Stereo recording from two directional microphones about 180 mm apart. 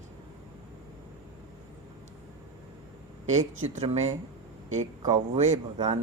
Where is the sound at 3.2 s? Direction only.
40° right (ahead or behind).